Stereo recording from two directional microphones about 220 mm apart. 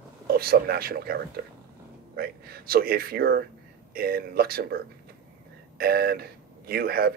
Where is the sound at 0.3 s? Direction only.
45° right (ahead or behind).